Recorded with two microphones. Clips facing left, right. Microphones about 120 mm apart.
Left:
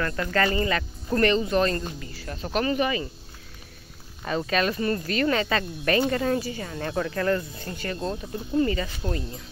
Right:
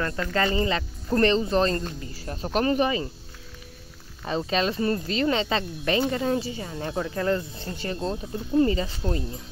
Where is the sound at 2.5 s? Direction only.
35° right (ahead or behind).